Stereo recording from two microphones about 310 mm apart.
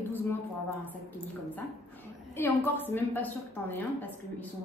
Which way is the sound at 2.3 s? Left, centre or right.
Centre.